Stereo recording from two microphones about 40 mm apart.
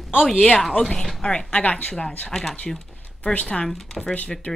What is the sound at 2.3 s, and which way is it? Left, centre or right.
Speech, centre.